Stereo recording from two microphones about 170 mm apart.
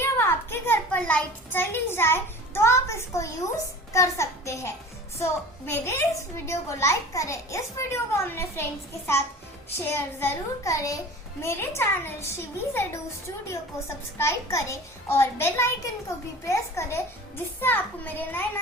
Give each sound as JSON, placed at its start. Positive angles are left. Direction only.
{"t": 0.0, "sound": "a child's voice", "side_deg": 15}
{"t": 9.6, "sound": "a child's voice", "side_deg": 15}